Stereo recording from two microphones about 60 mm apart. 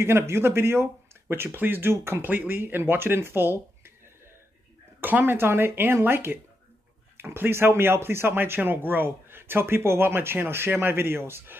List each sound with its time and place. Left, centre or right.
0.0 s speech: right
5.0 s speech: right